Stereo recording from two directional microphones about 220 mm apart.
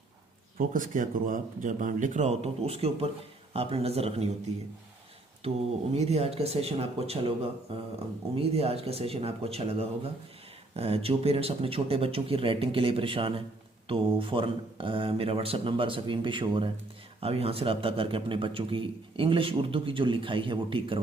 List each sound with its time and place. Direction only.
0.7 s a man's voice: 35° right (ahead or behind)
8.4 s a man's voice: 25° right (ahead or behind)
10.8 s a man's voice: 25° right (ahead or behind)